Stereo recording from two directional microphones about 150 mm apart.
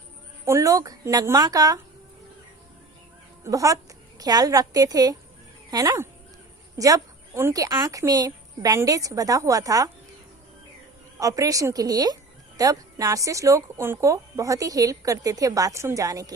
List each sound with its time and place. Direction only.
0.4 s speech: 20° right (ahead or behind)
3.4 s speech: 20° right (ahead or behind)
11.2 s speech: 20° right (ahead or behind)